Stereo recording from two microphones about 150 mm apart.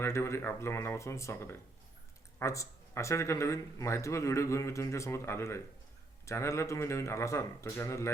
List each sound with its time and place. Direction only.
0.0 s speech: 15° left (ahead or behind)